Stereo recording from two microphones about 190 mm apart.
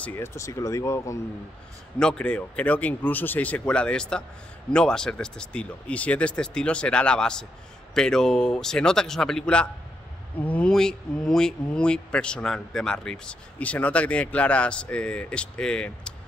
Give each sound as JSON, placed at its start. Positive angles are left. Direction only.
{"t": 0.0, "sound": "speech", "side_deg": 10}
{"t": 2.0, "sound": "speech", "side_deg": 5}